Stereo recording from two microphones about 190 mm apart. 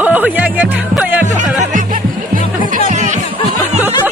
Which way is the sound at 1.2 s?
40° right (ahead or behind).